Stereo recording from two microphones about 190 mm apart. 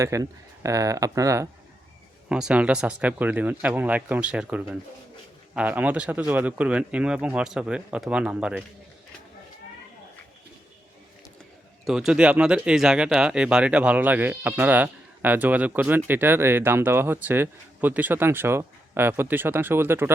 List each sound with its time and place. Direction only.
0.0 s speech: 15° right (ahead or behind)
2.3 s speech: 5° right (ahead or behind)
11.9 s speech: 5° right (ahead or behind)